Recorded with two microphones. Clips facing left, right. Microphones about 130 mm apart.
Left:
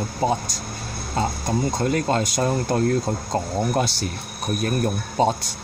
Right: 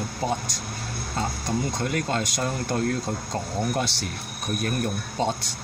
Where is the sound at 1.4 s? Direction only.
40° left (ahead or behind).